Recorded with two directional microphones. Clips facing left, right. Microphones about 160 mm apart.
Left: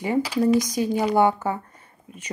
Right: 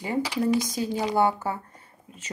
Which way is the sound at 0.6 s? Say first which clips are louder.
Left 4 dB; 20° left (ahead or behind).